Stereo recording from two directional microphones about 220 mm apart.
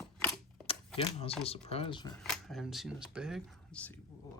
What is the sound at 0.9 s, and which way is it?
Speech, 25° left (ahead or behind).